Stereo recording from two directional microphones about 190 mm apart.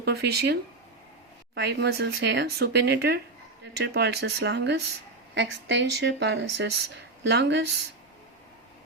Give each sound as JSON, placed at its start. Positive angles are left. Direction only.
{"t": 0.0, "sound": "speech", "side_deg": -60}